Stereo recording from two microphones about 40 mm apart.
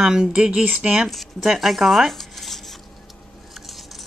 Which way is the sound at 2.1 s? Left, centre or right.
Centre.